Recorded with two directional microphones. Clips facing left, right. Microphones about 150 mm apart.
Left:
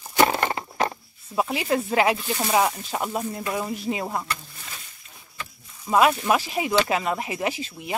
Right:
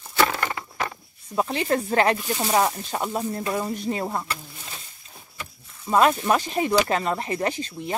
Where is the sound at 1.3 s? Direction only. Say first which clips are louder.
Even; 5° left (ahead or behind).